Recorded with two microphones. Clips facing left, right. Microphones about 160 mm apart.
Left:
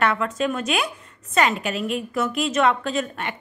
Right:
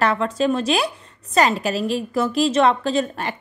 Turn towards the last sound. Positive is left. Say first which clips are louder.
# right 4 dB
turn(degrees=-35)  # may be behind; listen again after turning